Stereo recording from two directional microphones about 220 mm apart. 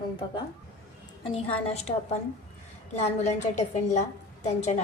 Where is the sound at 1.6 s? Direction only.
30° left (ahead or behind).